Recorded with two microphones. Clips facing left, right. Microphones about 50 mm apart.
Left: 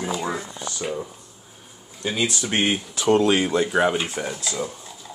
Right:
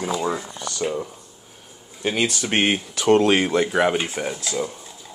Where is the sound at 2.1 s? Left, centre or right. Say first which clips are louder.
Right 1 dB; right.